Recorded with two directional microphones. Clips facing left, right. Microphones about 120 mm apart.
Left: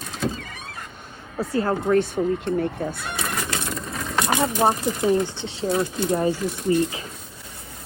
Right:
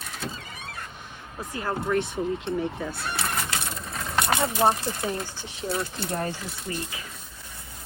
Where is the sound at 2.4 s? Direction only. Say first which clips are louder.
Left 4 dB; 50° left (ahead or behind).